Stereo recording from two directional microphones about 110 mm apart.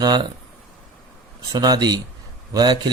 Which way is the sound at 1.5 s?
35° right (ahead or behind).